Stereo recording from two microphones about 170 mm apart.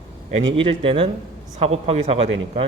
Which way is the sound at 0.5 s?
30° right (ahead or behind).